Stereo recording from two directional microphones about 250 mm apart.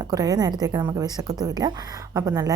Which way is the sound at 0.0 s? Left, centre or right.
Centre.